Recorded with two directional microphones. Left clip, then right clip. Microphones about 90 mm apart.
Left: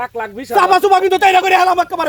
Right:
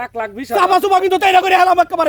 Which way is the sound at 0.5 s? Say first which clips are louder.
Left 2 dB; 85° right.